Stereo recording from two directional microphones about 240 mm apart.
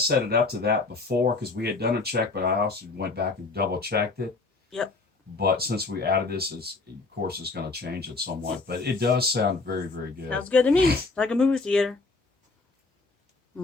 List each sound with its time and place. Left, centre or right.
0.0 s speech: right
5.4 s speech: right
10.2 s speech: centre